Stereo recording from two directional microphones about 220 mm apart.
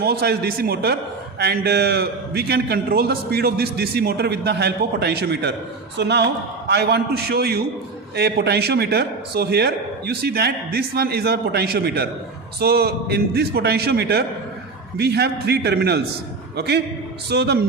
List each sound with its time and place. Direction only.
0.0 s a man's voice: 45° right (ahead or behind)